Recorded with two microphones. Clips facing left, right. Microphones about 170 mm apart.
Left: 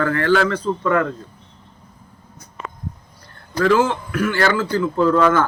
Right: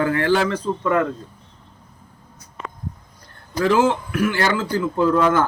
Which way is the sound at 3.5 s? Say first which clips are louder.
Left 1 dB; 20° right (ahead or behind).